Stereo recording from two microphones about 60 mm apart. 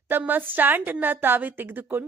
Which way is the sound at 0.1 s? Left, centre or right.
Right.